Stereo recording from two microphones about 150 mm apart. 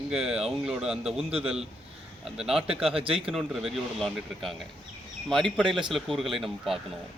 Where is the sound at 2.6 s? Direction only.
40° right (ahead or behind).